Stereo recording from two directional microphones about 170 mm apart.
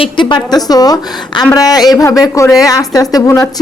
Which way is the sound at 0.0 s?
30° left (ahead or behind).